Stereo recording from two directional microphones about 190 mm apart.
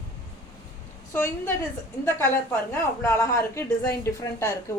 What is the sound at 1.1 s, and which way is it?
A woman's voice, 10° left (ahead or behind).